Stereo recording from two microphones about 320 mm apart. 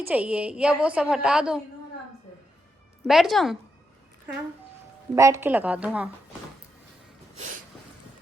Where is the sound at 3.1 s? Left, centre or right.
Centre.